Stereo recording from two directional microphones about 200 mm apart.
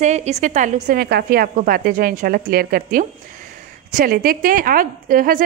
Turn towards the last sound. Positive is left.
turn(degrees=-45)  # may be behind; listen again after turning